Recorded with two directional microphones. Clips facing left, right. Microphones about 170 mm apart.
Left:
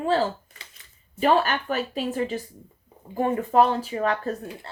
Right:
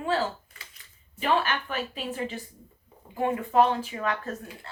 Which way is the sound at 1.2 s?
40° left (ahead or behind).